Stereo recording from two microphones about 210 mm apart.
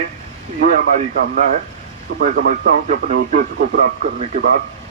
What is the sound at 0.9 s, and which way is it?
A man's voice, 40° right (ahead or behind).